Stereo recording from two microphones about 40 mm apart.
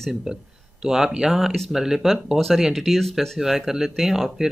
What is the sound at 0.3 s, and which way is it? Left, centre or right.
Speech, centre.